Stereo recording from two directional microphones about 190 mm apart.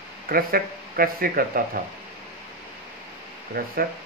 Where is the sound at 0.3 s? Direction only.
50° right (ahead or behind).